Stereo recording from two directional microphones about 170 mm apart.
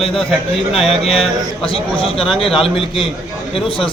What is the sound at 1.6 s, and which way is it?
A man's voice, 35° left (ahead or behind).